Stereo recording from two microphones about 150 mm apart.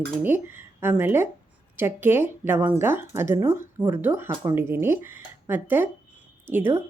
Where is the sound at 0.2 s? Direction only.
15° right (ahead or behind).